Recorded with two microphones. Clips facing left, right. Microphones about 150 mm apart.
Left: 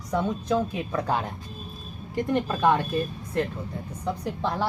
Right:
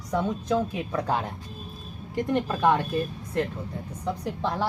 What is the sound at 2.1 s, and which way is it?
Speech, centre (ahead or behind).